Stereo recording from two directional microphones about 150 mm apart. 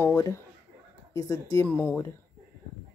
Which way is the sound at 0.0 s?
20° left (ahead or behind).